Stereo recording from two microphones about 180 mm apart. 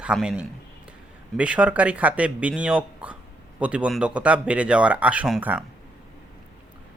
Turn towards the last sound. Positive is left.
turn(degrees=-5)  # may be behind; listen again after turning